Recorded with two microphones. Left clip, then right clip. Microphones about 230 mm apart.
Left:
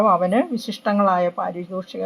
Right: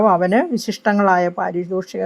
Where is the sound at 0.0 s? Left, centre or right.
Right.